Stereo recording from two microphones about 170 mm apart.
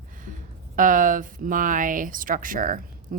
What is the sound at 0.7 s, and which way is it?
Speech, 50° right (ahead or behind).